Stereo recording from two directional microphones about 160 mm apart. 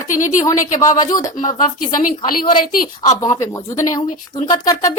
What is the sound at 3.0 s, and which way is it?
A woman's voice, 20° left (ahead or behind).